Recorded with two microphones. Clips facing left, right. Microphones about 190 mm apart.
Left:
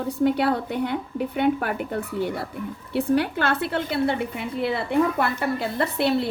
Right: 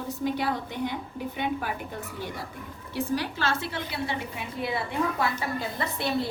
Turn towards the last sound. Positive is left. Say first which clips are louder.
# left 7 dB
turn(degrees=65)  # may be behind; listen again after turning